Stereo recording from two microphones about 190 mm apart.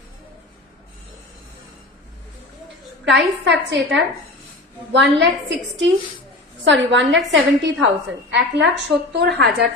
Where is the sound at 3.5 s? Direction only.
70° right (ahead or behind).